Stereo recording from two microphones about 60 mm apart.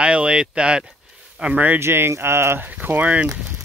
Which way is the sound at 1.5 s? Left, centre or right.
Right.